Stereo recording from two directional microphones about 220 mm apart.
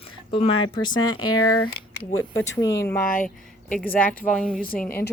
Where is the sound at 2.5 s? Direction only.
15° left (ahead or behind).